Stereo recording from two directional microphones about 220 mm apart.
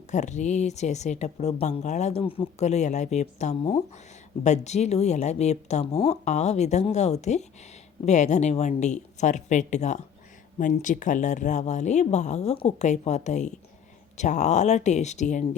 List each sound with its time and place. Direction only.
0.1 s speech: 35° left (ahead or behind)